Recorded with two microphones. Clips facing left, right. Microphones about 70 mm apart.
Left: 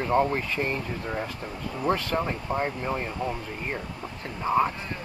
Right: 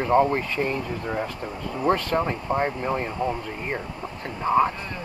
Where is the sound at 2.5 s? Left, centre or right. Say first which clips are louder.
Right 4 dB; right.